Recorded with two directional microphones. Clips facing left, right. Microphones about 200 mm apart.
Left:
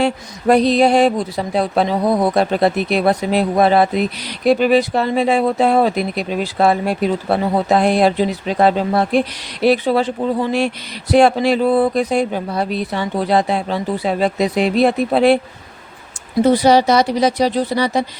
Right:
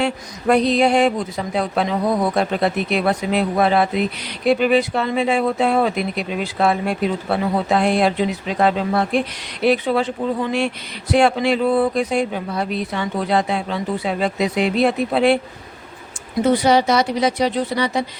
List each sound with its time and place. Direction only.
0.0 s speech: 35° left (ahead or behind)
16.4 s speech: 35° left (ahead or behind)